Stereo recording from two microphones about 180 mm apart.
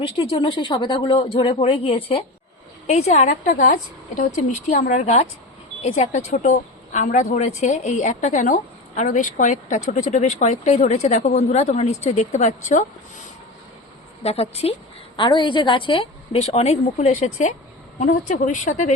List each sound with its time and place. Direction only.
0.0 s a woman's voice: 30° left (ahead or behind)